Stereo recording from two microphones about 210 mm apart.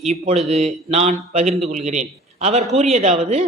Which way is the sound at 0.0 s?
30° right (ahead or behind).